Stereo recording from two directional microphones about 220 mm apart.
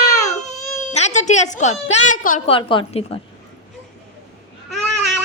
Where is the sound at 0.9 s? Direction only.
30° left (ahead or behind).